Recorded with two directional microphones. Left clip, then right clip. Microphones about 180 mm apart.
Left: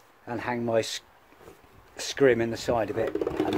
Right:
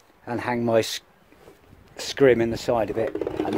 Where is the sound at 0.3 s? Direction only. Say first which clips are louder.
Right 5 dB; 50° right (ahead or behind).